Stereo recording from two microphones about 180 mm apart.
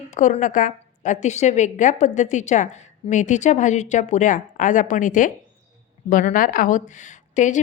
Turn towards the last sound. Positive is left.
turn(degrees=45)  # may be behind; listen again after turning